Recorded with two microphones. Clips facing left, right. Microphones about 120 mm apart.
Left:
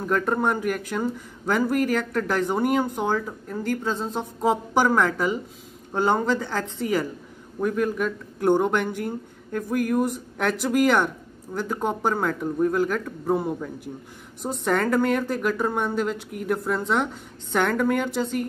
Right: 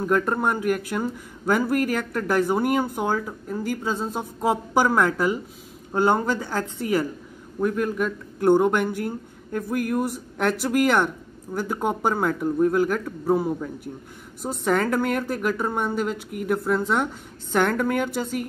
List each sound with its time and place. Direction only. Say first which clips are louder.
0.0 s speech: right 1 dB; 5° right (ahead or behind)